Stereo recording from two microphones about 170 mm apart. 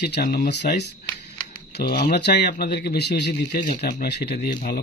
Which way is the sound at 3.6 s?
50° left (ahead or behind).